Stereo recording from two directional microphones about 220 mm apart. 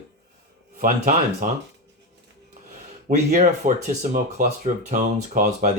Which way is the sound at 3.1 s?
30° right (ahead or behind).